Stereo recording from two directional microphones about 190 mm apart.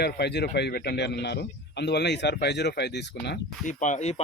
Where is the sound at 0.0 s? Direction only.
60° left (ahead or behind).